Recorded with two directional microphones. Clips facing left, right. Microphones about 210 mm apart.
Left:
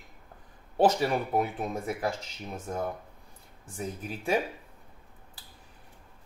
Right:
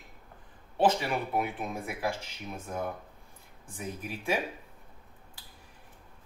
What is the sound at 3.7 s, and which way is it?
Speech, 40° left (ahead or behind).